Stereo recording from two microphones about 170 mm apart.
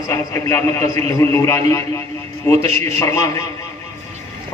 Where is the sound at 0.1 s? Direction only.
15° left (ahead or behind).